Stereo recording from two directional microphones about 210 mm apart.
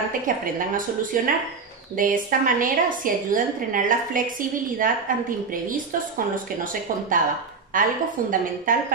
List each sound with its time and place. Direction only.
0.6 s a woman's voice: 40° right (ahead or behind)